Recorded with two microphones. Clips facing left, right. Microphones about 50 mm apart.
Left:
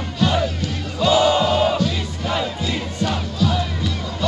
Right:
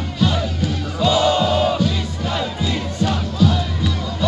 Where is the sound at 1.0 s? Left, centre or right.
Centre.